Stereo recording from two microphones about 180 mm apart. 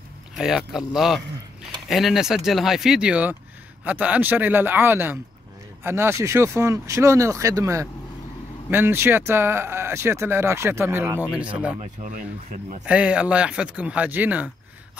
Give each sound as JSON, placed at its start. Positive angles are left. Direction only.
{"t": 0.4, "sound": "speech", "side_deg": -5}
{"t": 11.8, "sound": "speech", "side_deg": -40}
{"t": 12.8, "sound": "speech", "side_deg": -5}